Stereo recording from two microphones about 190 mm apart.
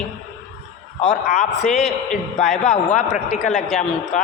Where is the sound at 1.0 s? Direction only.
40° left (ahead or behind).